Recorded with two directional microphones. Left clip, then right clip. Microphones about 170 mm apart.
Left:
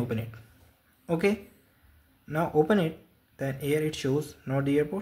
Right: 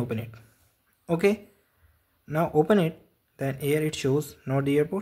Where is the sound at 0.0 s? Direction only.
20° right (ahead or behind).